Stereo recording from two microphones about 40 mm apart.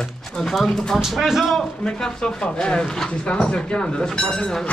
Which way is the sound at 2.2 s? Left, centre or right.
Left.